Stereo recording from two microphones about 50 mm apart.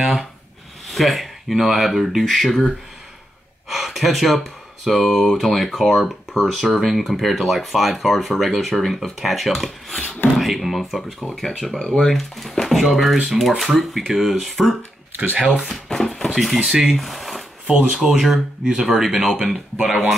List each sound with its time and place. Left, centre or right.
0.8 s speech: centre
3.6 s speech: centre
10.0 s speech: left
10.3 s speech: centre
15.9 s a sound: centre
16.3 s speech: centre
16.8 s a sound: centre
17.9 s speech: centre